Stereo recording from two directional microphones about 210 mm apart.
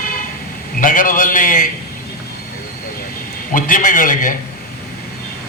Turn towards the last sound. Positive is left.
turn(degrees=40)  # may be behind; listen again after turning